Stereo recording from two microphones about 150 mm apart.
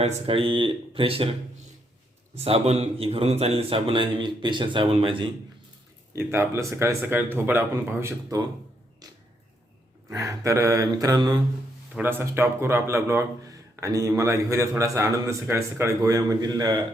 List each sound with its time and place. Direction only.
0.0 s a man's voice: 40° right (ahead or behind)
6.1 s speech: 15° right (ahead or behind)
10.1 s a man's voice: 20° right (ahead or behind)
11.9 s a man's voice: 15° right (ahead or behind)